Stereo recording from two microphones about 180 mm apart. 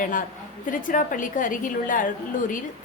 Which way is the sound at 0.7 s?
50° left (ahead or behind).